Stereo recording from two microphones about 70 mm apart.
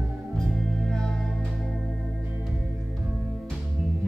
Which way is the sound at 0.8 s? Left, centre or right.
Centre.